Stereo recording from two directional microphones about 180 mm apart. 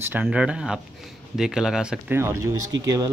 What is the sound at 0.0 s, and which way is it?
Speech, 10° right (ahead or behind).